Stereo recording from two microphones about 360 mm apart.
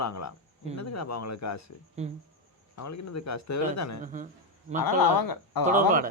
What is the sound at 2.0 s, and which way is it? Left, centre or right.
Speech, centre.